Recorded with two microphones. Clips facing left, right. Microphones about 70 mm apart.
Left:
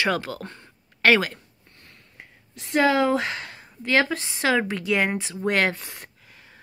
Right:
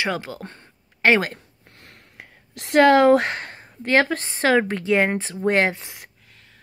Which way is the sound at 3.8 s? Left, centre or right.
Right.